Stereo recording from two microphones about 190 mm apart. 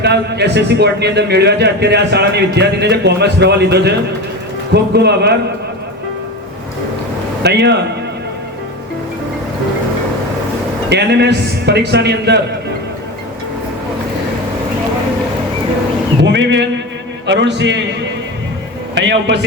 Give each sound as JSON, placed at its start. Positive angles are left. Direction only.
{"t": 0.0, "sound": "speech", "side_deg": -60}
{"t": 7.4, "sound": "speech", "side_deg": -60}
{"t": 10.8, "sound": "speech", "side_deg": -60}
{"t": 16.2, "sound": "a sound", "side_deg": -65}
{"t": 17.2, "sound": "a man's voice", "side_deg": -65}
{"t": 18.9, "sound": "speech", "side_deg": -65}